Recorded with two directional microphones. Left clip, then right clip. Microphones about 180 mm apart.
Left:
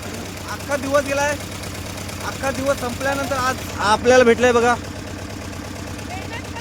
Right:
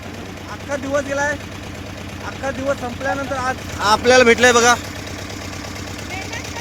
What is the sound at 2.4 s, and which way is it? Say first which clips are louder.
Speech: left 1 dB; 5° left (ahead or behind).